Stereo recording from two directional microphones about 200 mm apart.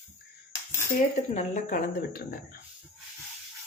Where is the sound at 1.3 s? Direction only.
35° left (ahead or behind).